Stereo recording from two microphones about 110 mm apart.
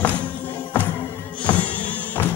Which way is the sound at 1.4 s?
15° left (ahead or behind).